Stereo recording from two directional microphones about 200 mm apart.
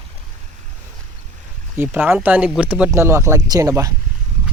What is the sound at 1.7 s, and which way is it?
Speech, 10° right (ahead or behind).